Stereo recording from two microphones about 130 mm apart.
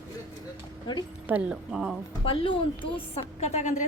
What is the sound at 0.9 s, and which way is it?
Speech, 35° left (ahead or behind).